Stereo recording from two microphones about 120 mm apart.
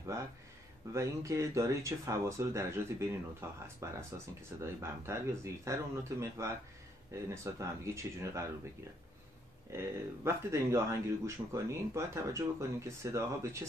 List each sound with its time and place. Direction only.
0.9 s speech: 25° right (ahead or behind)
7.5 s speech: 25° right (ahead or behind)
9.7 s speech: 20° right (ahead or behind)